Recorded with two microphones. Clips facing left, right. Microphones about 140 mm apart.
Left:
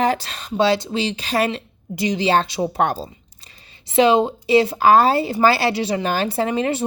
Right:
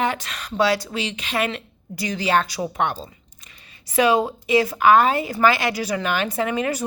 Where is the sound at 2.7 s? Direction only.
40° left (ahead or behind).